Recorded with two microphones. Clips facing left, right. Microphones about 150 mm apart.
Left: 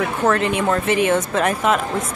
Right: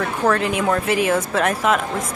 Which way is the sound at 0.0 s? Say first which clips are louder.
Left 1 dB; centre (ahead or behind).